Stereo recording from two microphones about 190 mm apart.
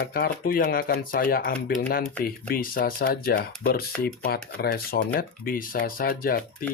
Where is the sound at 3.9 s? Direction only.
5° left (ahead or behind).